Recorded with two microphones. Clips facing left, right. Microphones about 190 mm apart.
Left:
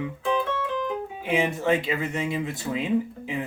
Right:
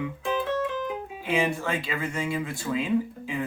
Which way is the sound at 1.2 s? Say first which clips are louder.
Left 3 dB; 20° left (ahead or behind).